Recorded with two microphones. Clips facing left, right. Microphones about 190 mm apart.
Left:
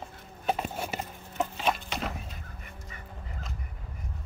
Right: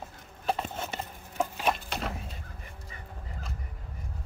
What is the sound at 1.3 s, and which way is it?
Wood, 10° right (ahead or behind).